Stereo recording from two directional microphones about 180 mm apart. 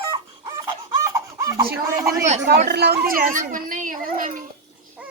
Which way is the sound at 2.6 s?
65° right (ahead or behind).